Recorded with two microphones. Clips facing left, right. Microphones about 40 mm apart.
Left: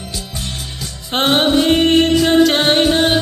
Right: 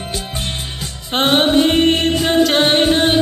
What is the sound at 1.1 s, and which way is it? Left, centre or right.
Music, centre.